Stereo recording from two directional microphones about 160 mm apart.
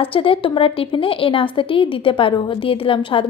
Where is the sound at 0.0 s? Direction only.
35° left (ahead or behind).